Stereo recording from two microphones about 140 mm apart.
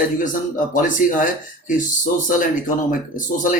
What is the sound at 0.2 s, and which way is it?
Speech, 70° left (ahead or behind).